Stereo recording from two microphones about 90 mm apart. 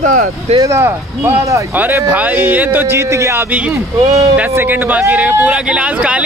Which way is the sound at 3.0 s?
35° right (ahead or behind).